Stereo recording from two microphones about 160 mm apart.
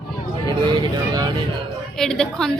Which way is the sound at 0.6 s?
25° right (ahead or behind).